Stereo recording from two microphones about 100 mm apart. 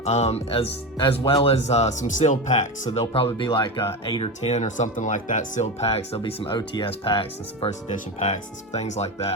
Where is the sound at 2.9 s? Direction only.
70° left (ahead or behind).